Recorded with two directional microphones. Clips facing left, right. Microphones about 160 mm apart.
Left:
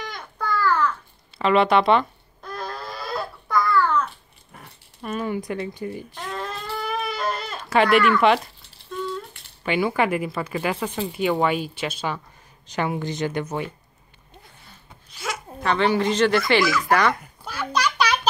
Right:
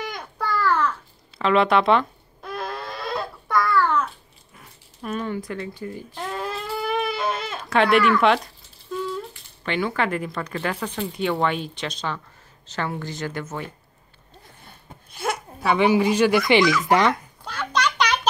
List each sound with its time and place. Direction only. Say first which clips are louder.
0.4 s babbling: even; centre (ahead or behind)
1.4 s a sound: left 1 dB; centre (ahead or behind)
5.0 s speech: left 1 dB; centre (ahead or behind)
5.3 s speech: left 2 dB; 15° left (ahead or behind)
6.3 s baby cry: right 1 dB; 5° right (ahead or behind)
9.6 s speech: left 3 dB; 10° left (ahead or behind)
15.0 s a sound: right 5 dB; 55° right (ahead or behind)
15.6 s speech: right 2 dB; 10° right (ahead or behind)
17.5 s a sound: even; 10° left (ahead or behind)